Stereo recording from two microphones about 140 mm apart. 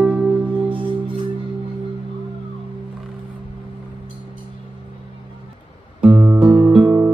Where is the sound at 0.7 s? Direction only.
35° right (ahead or behind).